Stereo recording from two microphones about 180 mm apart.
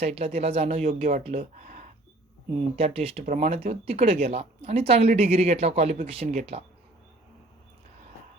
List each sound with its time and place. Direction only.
0.0 s speech: 35° right (ahead or behind)